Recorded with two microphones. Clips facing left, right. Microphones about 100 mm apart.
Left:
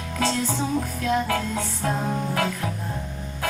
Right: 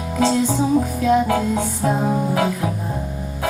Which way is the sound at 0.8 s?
10° right (ahead or behind).